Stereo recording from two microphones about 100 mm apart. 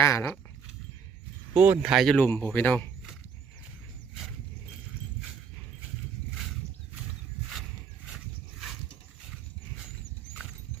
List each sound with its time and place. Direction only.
0.0 s speech: 25° left (ahead or behind)
1.5 s speech: 15° right (ahead or behind)
1.9 s speech: centre (ahead or behind)
2.1 s speech: 20° left (ahead or behind)